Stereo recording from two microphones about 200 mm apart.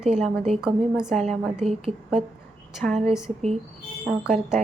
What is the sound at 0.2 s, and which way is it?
A woman's voice, centre (ahead or behind).